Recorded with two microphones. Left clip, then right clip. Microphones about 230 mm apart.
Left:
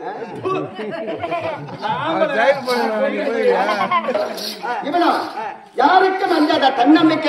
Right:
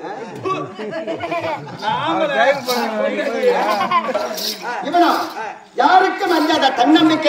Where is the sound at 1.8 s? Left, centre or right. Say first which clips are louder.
Even; centre.